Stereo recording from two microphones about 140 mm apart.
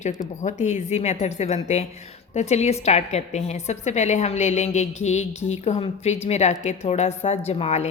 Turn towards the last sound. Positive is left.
turn(degrees=50)  # may be behind; listen again after turning